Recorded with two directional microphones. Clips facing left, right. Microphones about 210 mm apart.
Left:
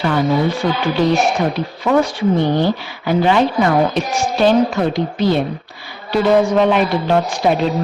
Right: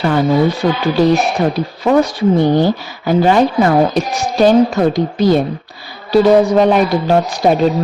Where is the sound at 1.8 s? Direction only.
35° right (ahead or behind).